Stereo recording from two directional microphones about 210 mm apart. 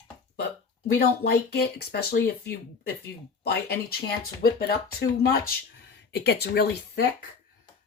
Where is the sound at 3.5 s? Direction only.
45° left (ahead or behind).